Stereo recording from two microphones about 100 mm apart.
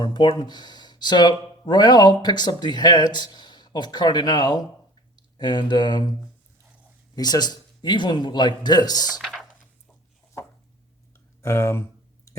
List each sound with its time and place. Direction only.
0.0 s speech: 50° left (ahead or behind)
7.2 s speech: 45° left (ahead or behind)
9.1 s a sound: centre (ahead or behind)
11.1 s clicking: 30° left (ahead or behind)